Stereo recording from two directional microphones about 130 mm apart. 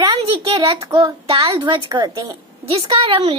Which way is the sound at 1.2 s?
45° right (ahead or behind).